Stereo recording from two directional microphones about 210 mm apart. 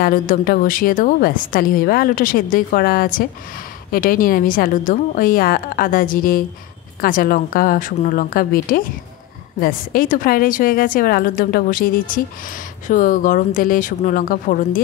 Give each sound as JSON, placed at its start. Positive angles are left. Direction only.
{"t": 0.0, "sound": "a woman's voice", "side_deg": 40}